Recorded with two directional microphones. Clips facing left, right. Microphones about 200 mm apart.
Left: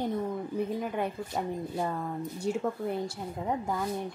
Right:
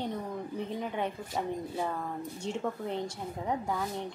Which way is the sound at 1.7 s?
5° right (ahead or behind).